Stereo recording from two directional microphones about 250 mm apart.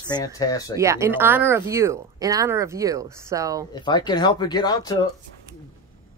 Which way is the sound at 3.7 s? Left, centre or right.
Centre.